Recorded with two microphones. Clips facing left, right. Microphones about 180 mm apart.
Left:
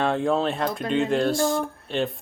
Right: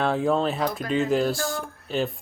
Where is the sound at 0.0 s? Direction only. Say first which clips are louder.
Even; centre (ahead or behind).